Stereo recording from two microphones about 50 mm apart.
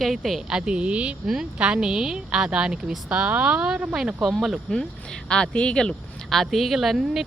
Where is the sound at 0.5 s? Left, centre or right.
Centre.